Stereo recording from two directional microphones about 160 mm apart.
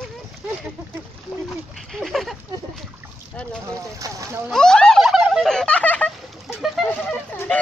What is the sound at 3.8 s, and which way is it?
Speech, 20° right (ahead or behind).